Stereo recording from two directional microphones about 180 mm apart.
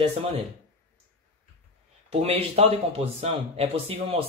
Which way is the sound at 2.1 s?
35° right (ahead or behind).